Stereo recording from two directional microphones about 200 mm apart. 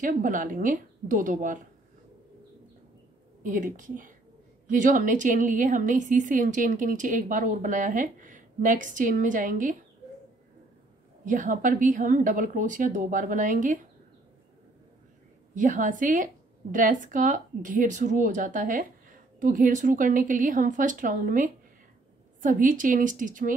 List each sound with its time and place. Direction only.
0.0 s a woman's voice: 40° right (ahead or behind)
3.4 s a woman's voice: 40° right (ahead or behind)
11.2 s a woman's voice: 40° right (ahead or behind)
15.5 s a woman's voice: 40° right (ahead or behind)